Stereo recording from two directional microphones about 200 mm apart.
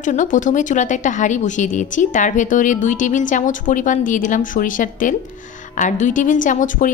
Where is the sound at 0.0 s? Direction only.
40° left (ahead or behind).